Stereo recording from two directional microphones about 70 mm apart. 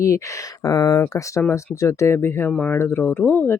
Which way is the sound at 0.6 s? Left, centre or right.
Left.